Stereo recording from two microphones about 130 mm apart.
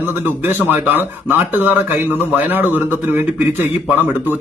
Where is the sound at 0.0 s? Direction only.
15° right (ahead or behind).